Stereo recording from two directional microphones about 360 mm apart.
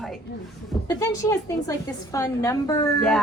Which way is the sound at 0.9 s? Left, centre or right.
Centre.